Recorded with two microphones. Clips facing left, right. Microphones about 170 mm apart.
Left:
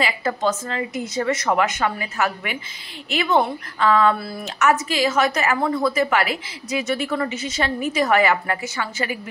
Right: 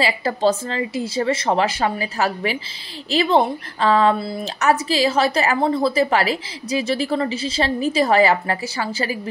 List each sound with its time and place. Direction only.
0.0 s a woman's voice: 30° right (ahead or behind)
4.6 s a woman's voice: 35° right (ahead or behind)